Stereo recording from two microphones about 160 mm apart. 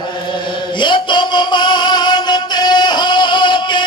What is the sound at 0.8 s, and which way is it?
Music, 30° left (ahead or behind).